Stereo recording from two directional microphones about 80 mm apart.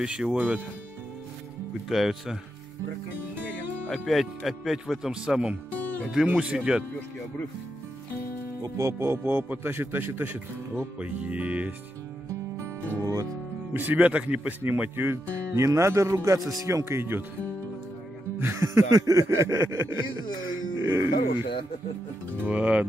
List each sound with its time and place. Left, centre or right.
0.0 s speech: centre
1.9 s speech: centre
3.9 s speech: centre
8.6 s speech: right; by 11.7 s centre
12.5 s music: right
13.7 s speech: centre
18.4 s speech: right
22.5 s speech: centre